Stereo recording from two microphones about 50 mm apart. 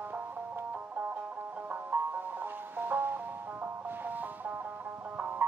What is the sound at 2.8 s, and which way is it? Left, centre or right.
Music, right.